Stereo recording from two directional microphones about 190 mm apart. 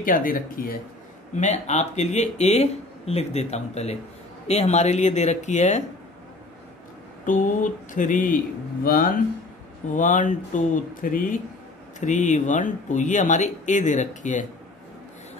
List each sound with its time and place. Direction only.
0.0 s speech: 45° left (ahead or behind)
1.3 s speech: 35° left (ahead or behind)
7.2 s speech: 45° left (ahead or behind)